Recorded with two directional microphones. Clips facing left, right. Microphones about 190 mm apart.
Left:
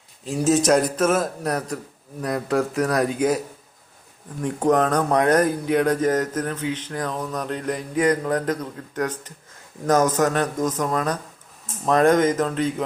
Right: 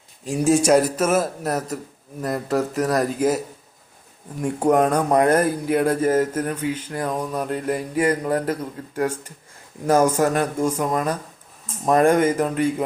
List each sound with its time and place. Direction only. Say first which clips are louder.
0.3 s speech: right 1 dB; 10° right (ahead or behind)